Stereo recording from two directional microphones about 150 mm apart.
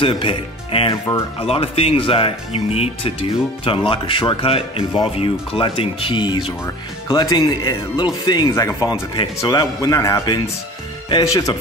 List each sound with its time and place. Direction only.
0.0 s speech: 35° left (ahead or behind)